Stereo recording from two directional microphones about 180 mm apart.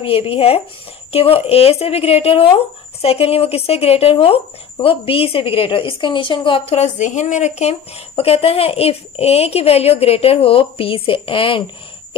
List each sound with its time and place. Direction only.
0.0 s speech: 30° left (ahead or behind)